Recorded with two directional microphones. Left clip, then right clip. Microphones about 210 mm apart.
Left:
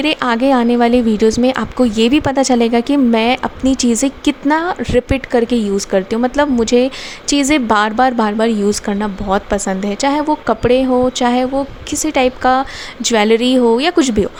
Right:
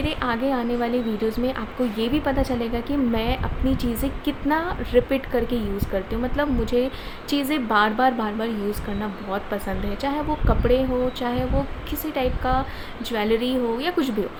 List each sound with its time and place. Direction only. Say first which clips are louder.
0.0 s a woman's voice: left 10 dB; 50° left (ahead or behind)